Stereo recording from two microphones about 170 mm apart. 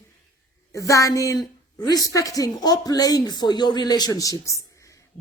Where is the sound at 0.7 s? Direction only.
20° left (ahead or behind).